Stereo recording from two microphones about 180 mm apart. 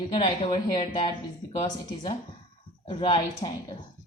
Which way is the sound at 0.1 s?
30° left (ahead or behind).